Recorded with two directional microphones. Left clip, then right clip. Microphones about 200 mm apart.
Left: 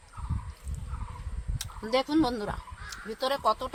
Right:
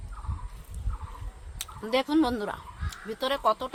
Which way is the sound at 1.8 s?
10° right (ahead or behind).